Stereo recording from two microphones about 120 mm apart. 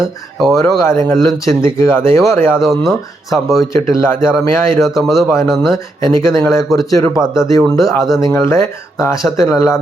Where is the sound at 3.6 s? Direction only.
25° left (ahead or behind).